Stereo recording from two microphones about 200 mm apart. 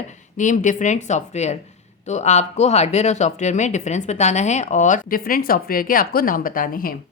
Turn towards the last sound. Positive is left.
turn(degrees=45)  # may be behind; listen again after turning